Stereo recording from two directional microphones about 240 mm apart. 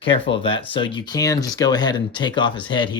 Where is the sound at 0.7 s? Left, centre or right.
Left.